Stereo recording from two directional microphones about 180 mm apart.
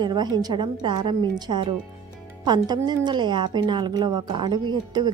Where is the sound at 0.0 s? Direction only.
25° right (ahead or behind).